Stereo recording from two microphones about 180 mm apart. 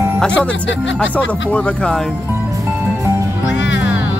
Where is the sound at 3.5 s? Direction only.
85° left.